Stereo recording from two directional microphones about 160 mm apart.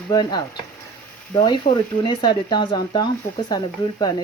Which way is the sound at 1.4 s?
30° left (ahead or behind).